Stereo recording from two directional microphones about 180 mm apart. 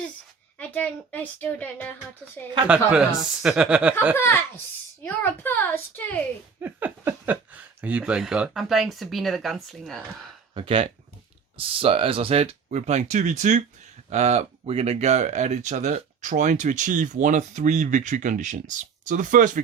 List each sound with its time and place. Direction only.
0.6 s speech: 10° left (ahead or behind)
2.6 s speech: 5° right (ahead or behind)
4.2 s speech: 15° left (ahead or behind)
6.6 s speech: 10° right (ahead or behind)
10.5 s speech: 30° right (ahead or behind); by 19.6 s 45° right (ahead or behind)